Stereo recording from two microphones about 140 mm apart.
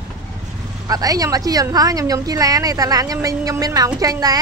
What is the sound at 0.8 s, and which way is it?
A woman's voice, 25° right (ahead or behind).